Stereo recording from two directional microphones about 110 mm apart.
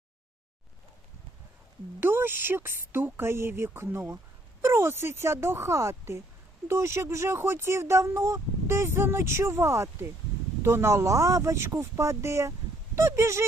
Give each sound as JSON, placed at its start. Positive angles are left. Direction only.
{"t": 2.0, "sound": "speech", "side_deg": -20}